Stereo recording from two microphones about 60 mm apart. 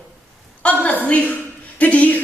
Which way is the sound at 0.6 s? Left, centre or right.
Left.